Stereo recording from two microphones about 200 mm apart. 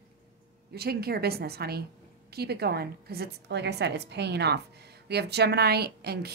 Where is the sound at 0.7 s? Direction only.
50° right (ahead or behind).